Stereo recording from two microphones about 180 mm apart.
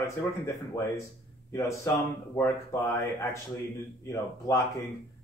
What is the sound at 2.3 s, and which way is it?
Speech, 10° left (ahead or behind).